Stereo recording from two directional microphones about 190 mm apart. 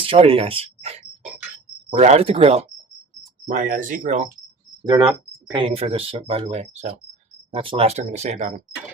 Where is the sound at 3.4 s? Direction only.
45° right (ahead or behind).